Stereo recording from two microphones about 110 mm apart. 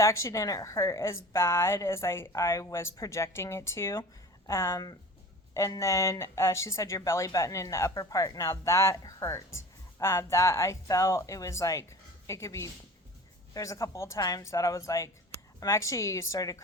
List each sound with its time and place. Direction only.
0.0 s a woman's voice: 25° left (ahead or behind)